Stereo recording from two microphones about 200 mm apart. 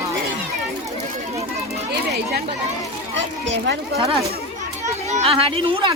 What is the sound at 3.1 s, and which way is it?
Speech, 65° right (ahead or behind).